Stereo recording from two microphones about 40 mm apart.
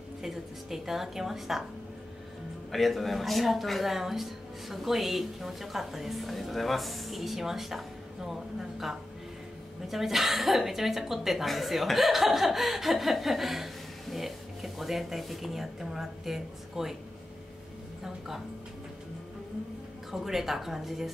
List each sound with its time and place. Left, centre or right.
0.2 s a woman's voice: centre
2.7 s speech: centre
18.0 s a woman's voice: centre
20.1 s a woman's voice: centre